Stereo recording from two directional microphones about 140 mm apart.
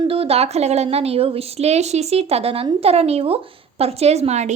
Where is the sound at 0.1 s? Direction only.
45° right (ahead or behind).